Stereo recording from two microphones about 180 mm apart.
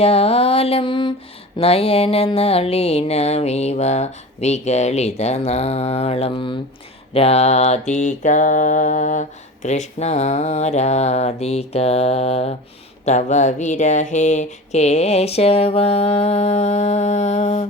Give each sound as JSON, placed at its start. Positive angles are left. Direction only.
{"t": 0.0, "sound": "mantra", "side_deg": 35}